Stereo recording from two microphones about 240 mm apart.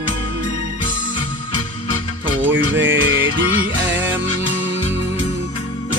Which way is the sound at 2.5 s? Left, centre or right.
Right.